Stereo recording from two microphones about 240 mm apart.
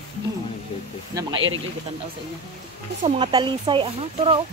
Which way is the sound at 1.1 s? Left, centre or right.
Centre.